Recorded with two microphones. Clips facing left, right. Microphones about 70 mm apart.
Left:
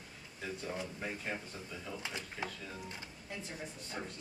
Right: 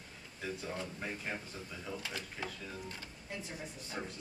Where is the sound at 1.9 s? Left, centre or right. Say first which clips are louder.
Right 1 dB; centre.